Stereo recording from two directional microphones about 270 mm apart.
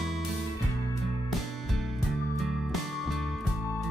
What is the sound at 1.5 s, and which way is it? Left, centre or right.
Music, centre.